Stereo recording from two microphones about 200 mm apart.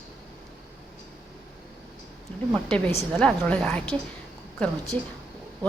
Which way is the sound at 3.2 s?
5° left (ahead or behind).